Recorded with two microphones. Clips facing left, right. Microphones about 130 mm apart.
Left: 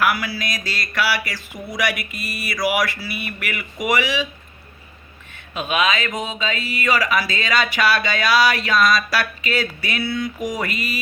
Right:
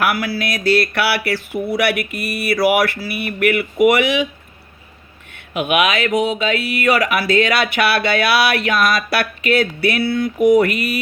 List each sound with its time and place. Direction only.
0.0 s speech: 55° right (ahead or behind)
5.3 s speech: 65° right (ahead or behind)